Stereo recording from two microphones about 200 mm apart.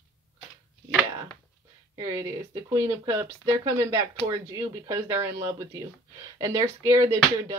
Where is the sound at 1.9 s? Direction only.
15° right (ahead or behind).